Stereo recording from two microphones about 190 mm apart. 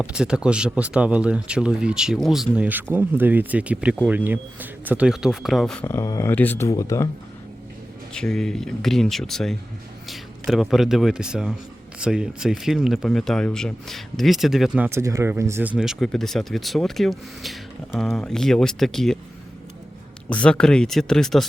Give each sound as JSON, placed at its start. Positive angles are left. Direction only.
{"t": 0.0, "sound": "speech", "side_deg": -5}
{"t": 5.8, "sound": "speech", "side_deg": 15}
{"t": 8.1, "sound": "speech", "side_deg": 5}
{"t": 20.3, "sound": "speech", "side_deg": 5}